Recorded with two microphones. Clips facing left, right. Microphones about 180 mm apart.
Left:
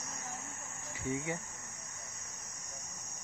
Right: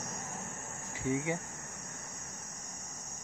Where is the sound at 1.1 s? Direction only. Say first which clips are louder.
Right 4 dB; 15° right (ahead or behind).